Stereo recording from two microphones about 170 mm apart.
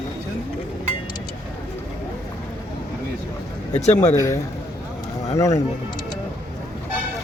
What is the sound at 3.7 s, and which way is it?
Speech, 40° left (ahead or behind).